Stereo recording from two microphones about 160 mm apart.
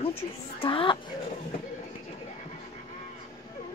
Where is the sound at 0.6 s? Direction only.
35° left (ahead or behind).